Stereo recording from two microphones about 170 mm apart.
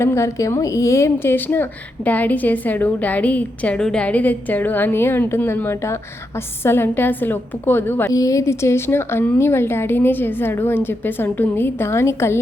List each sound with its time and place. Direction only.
0.0 s a woman's voice: 15° left (ahead or behind)